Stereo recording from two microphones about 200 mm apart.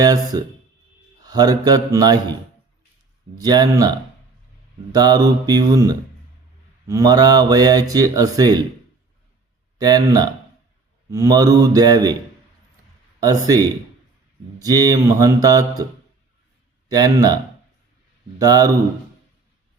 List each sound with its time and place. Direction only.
0.0 s speech: 20° right (ahead or behind)
3.3 s speech: 20° right (ahead or behind)
9.7 s speech: 20° right (ahead or behind)
13.1 s speech: 20° right (ahead or behind)
14.6 s mantra: 20° right (ahead or behind)
16.9 s speech: 20° right (ahead or behind)
18.3 s mantra: 15° right (ahead or behind)